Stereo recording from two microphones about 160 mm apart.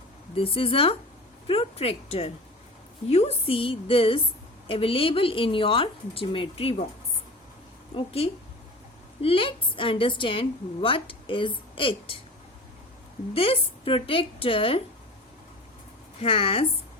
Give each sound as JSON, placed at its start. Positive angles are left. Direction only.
{"t": 0.3, "sound": "a woman's voice", "side_deg": 35}
{"t": 7.9, "sound": "a woman's voice", "side_deg": 35}
{"t": 13.3, "sound": "a woman's voice", "side_deg": 35}
{"t": 16.2, "sound": "a woman's voice", "side_deg": 35}